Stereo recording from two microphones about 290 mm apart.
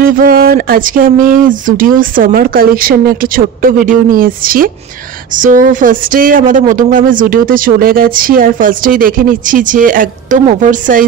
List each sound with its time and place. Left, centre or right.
0.0 s speech: right